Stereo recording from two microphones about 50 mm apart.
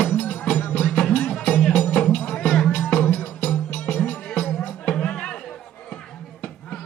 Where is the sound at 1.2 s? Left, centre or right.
Centre.